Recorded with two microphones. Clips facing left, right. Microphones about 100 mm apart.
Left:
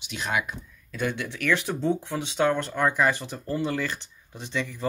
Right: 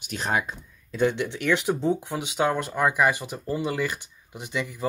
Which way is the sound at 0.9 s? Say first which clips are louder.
Right 6 dB; 25° right (ahead or behind).